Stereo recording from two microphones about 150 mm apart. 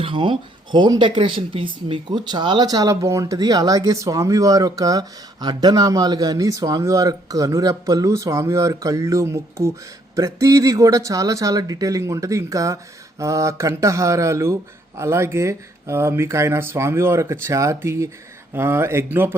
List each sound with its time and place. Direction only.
0.0 s speech: 35° right (ahead or behind); by 19.4 s 15° right (ahead or behind)